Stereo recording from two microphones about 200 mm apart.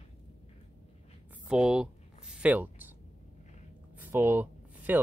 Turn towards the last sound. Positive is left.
turn(degrees=-10)  # may be behind; listen again after turning